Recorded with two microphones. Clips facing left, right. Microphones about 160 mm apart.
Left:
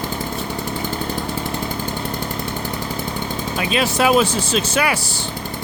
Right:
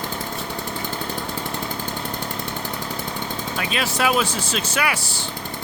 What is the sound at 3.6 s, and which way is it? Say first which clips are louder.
Speech: left 5 dB; 20° left (ahead or behind).